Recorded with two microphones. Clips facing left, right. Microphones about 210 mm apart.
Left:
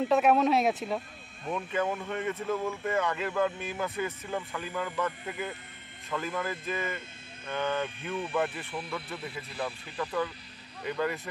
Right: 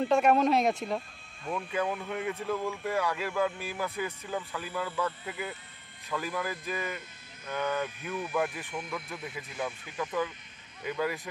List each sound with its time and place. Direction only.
0.0 s speech: centre (ahead or behind)
8.0 s speech: 30° left (ahead or behind)
8.9 s speech: 5° left (ahead or behind)
9.5 s speech: 35° left (ahead or behind)
9.9 s speech: 10° right (ahead or behind)